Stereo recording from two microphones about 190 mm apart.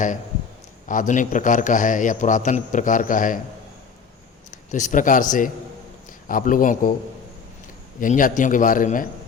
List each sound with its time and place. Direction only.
0.9 s a man's voice: 45° left (ahead or behind)
4.5 s a man's voice: 40° left (ahead or behind)
8.0 s a man's voice: 45° left (ahead or behind)